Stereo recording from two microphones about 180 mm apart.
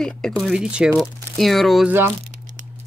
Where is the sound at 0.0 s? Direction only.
5° left (ahead or behind).